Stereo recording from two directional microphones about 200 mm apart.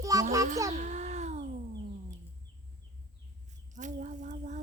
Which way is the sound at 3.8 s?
40° right (ahead or behind).